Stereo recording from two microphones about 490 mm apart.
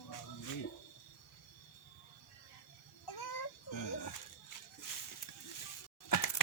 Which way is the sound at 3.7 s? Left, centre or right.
Left.